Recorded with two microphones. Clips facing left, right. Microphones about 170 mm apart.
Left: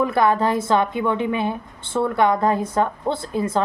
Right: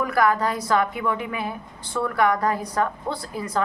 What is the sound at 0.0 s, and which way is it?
A woman's voice, 25° left (ahead or behind).